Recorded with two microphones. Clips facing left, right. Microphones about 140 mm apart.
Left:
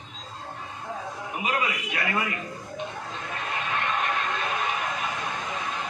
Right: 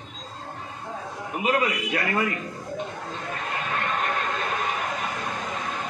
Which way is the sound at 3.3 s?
45° right (ahead or behind).